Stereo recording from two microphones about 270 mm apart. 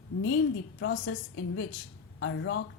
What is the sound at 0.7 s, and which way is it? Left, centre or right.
A woman's voice, left.